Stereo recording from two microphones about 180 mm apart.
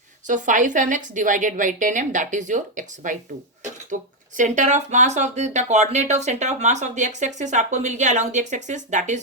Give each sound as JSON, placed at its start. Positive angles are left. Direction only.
{"t": 0.3, "sound": "a woman's voice", "side_deg": -45}